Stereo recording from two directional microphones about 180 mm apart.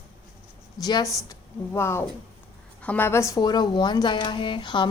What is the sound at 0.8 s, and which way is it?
Speech, 20° left (ahead or behind).